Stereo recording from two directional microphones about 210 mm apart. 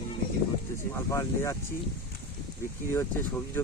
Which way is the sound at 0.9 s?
15° left (ahead or behind).